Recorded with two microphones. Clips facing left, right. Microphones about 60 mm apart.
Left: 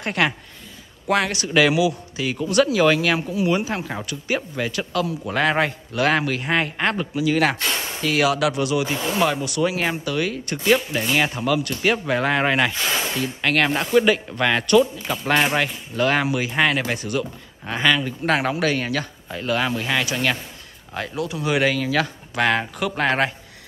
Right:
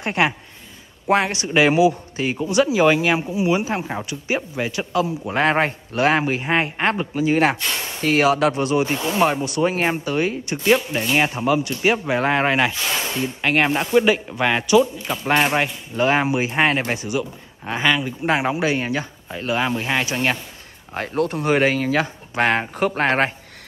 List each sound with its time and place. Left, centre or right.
0.0 s a man's voice: right
10.4 s speech: centre
11.3 s a man's voice: right; by 15.5 s centre
15.5 s a man's voice: right
20.9 s speech: right